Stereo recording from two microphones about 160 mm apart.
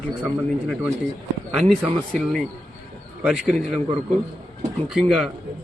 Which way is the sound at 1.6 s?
Centre (ahead or behind).